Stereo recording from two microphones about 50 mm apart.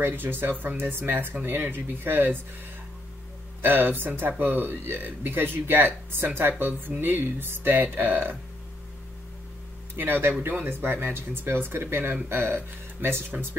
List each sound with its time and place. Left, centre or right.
0.0 s speech: right
3.6 s speech: right
9.9 s speech: right